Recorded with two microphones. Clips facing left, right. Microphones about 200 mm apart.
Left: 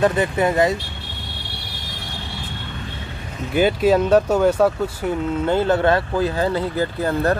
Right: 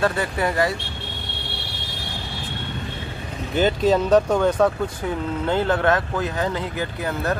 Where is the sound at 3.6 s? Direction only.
10° left (ahead or behind).